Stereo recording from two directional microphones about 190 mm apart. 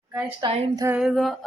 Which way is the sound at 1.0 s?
Centre (ahead or behind).